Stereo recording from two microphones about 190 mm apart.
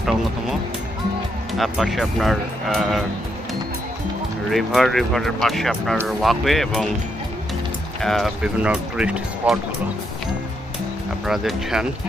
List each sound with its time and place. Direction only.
1.5 s speech: centre (ahead or behind)
4.5 s speech: centre (ahead or behind)
8.0 s speech: centre (ahead or behind)
11.3 s speech: centre (ahead or behind)